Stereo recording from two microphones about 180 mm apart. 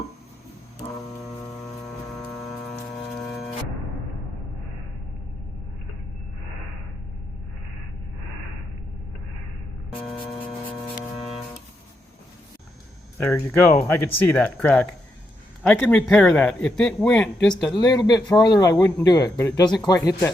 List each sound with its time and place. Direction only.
2.1 s music: centre (ahead or behind)
3.2 s a sound: centre (ahead or behind)
10.7 s hum: 30° left (ahead or behind)
13.1 s speech: 15° left (ahead or behind)
17.7 s speech: 20° left (ahead or behind)